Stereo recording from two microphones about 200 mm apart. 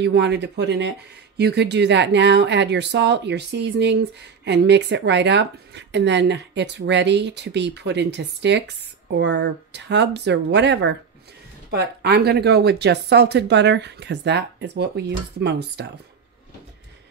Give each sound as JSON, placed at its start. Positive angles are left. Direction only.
{"t": 0.0, "sound": "speech", "side_deg": -60}